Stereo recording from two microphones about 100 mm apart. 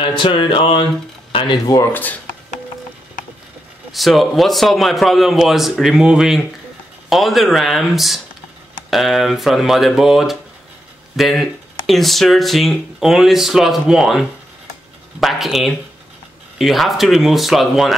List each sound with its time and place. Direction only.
0.2 s music: 55° left (ahead or behind)
1.9 s speech: 20° left (ahead or behind)
3.9 s speech: centre (ahead or behind)